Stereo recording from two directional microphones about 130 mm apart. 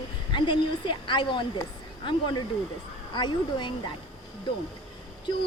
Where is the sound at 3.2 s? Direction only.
35° left (ahead or behind).